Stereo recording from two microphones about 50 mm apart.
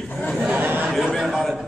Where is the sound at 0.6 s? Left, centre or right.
Right.